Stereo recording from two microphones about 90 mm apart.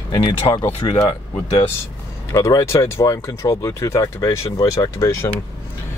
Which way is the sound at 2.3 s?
35° left (ahead or behind).